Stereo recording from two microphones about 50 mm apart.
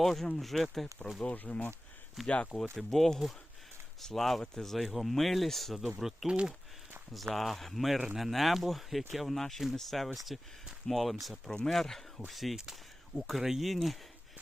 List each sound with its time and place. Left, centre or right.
0.0 s speech: centre
1.2 s speech: left
2.2 s speech: centre
2.7 s speech: centre
6.2 s speech: centre
7.1 s speech: centre